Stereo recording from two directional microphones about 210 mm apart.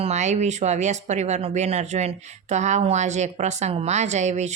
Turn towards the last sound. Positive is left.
turn(degrees=-35)  # may be behind; listen again after turning